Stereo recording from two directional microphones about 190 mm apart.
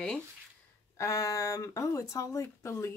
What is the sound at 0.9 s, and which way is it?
Speech, 15° left (ahead or behind).